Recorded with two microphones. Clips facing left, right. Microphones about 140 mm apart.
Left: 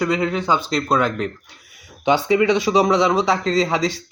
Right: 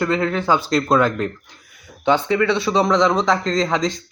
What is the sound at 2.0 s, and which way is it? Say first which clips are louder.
A man's voice: left 1 dB; 15° left (ahead or behind).